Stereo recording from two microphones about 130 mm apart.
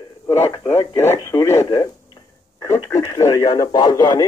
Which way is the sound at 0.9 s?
20° left (ahead or behind).